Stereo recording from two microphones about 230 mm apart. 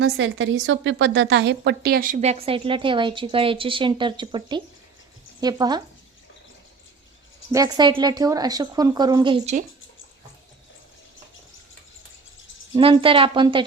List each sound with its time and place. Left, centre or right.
0.0 s a woman's voice: right; by 5.8 s centre
7.5 s a woman's voice: centre
12.7 s a woman's voice: right